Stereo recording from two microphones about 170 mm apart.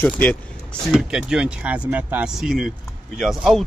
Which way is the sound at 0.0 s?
10° left (ahead or behind).